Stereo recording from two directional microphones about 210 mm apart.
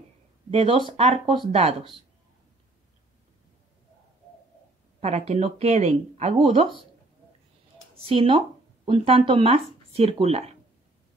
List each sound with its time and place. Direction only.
0.5 s speech: 25° right (ahead or behind)
5.0 s speech: 30° right (ahead or behind)
8.1 s speech: 25° right (ahead or behind)